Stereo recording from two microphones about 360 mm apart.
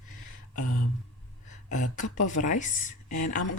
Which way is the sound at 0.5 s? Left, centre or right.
Left.